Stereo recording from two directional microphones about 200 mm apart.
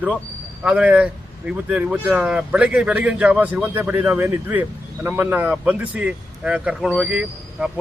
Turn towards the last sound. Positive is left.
turn(degrees=-5)  # may be behind; listen again after turning